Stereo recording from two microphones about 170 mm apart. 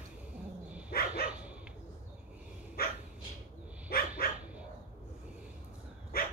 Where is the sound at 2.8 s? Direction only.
60° left (ahead or behind).